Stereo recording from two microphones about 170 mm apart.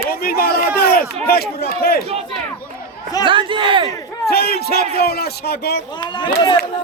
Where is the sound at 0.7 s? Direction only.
60° left (ahead or behind).